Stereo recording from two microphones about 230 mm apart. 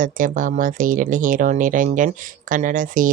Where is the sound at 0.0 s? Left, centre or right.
Right.